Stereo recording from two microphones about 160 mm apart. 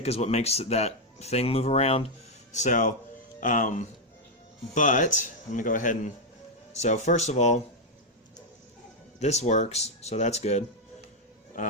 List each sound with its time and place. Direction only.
0.0 s speech: 40° left (ahead or behind)
2.5 s speech: 50° left (ahead or behind)
6.7 s speech: 45° left (ahead or behind)
9.2 s speech: 45° left (ahead or behind)